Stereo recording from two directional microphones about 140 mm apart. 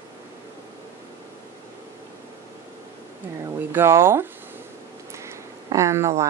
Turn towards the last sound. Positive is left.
turn(degrees=-20)  # may be behind; listen again after turning